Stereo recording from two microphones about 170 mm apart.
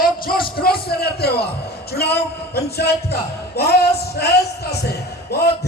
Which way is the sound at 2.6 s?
70° left (ahead or behind).